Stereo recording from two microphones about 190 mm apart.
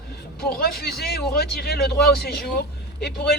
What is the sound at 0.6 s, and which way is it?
A man's voice, 55° left (ahead or behind).